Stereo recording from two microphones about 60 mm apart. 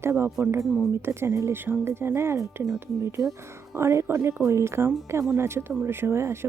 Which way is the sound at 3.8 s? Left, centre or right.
Right.